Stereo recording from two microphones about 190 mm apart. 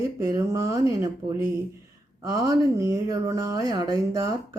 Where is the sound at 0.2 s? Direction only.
15° right (ahead or behind).